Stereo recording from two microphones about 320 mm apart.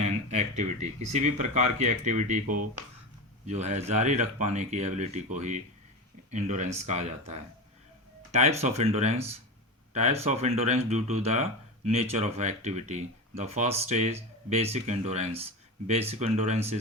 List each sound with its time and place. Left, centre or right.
0.0 s speech: centre